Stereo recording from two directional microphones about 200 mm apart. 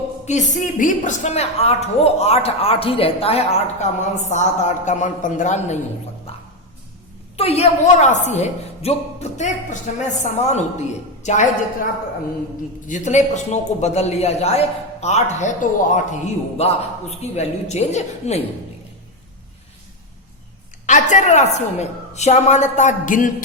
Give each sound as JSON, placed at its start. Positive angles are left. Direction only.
{"t": 0.3, "sound": "a woman's voice", "side_deg": 35}
{"t": 6.3, "sound": "a sound", "side_deg": 30}
{"t": 7.3, "sound": "a woman's voice", "side_deg": 30}
{"t": 12.9, "sound": "a woman's voice", "side_deg": 35}
{"t": 20.8, "sound": "a woman's voice", "side_deg": 40}